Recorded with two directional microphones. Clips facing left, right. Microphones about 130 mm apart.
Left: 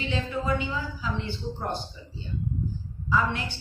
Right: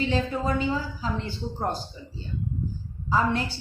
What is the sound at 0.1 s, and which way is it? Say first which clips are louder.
A woman's voice: right 2 dB; 40° right (ahead or behind).